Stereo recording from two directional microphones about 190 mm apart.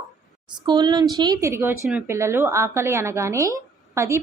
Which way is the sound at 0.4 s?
25° right (ahead or behind).